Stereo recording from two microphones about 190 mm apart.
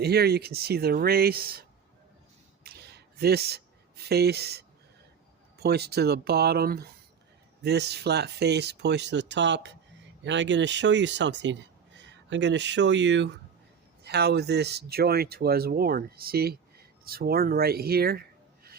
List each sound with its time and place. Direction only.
0.0 s speech: 55° right (ahead or behind)
2.6 s a sound: 55° right (ahead or behind)
5.5 s speech: 55° right (ahead or behind)